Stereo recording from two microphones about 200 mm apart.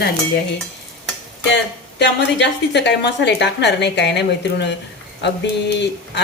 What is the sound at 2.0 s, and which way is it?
Speech, 60° left (ahead or behind).